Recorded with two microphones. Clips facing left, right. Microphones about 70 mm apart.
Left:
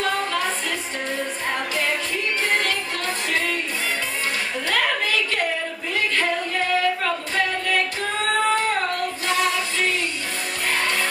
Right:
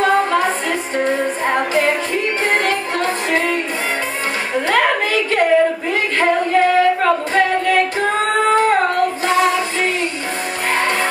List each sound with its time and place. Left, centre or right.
0.0 s music: right
4.6 s a sound: right
6.1 s singing: right
10.7 s music: right